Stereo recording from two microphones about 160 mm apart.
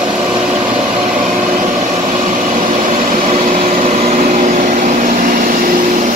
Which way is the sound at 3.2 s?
45° right (ahead or behind).